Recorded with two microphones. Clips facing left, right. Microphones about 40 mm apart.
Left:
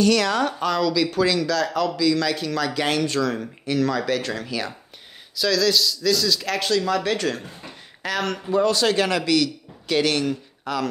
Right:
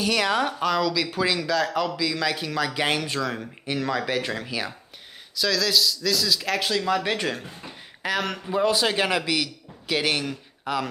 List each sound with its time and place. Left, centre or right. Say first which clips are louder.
0.0 s speech: left 3 dB; centre
5.3 s a man's voice: left 3 dB; centre